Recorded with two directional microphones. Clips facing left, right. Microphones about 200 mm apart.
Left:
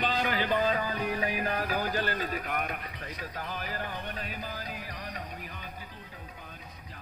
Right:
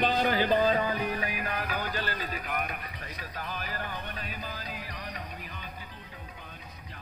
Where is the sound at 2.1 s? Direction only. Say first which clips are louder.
Left 2 dB; 50° left (ahead or behind).